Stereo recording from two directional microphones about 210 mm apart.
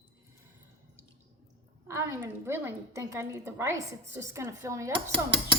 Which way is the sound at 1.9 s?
15° right (ahead or behind).